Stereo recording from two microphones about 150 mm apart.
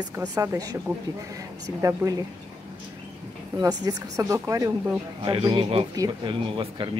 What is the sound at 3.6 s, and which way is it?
Speech, 25° right (ahead or behind).